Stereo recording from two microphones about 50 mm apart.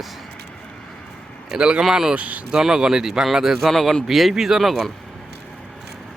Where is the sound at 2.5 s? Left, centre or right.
Centre.